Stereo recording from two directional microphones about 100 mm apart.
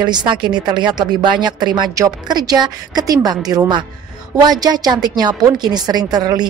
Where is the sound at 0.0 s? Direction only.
45° right (ahead or behind).